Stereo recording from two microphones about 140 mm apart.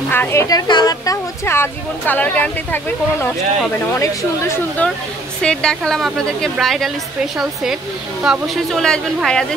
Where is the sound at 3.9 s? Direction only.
20° left (ahead or behind).